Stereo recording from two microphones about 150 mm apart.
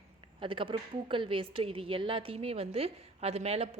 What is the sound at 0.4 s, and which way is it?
A woman's voice, 35° right (ahead or behind).